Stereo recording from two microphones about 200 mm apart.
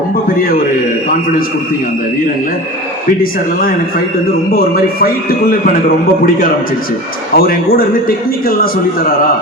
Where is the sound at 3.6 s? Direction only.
45° left (ahead or behind).